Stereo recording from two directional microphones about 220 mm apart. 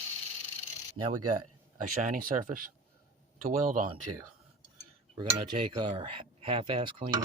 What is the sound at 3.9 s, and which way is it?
Speech, 90° right.